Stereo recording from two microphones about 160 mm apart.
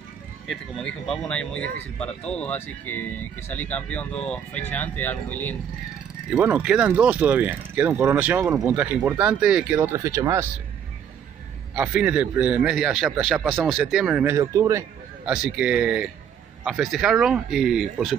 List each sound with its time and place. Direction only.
0.5 s speech: centre (ahead or behind)
6.3 s a man's voice: 10° right (ahead or behind)
9.8 s speech: 20° right (ahead or behind)
11.7 s a man's voice: 10° right (ahead or behind)
15.2 s a man's voice: 5° right (ahead or behind)